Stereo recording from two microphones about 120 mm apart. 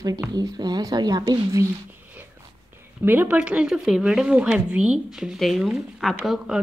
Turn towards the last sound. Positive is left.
turn(degrees=0)  # may be behind; listen again after turning